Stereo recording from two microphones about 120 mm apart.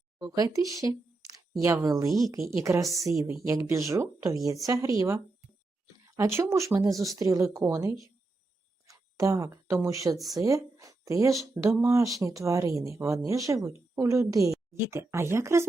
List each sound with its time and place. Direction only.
0.2 s speech: 30° right (ahead or behind)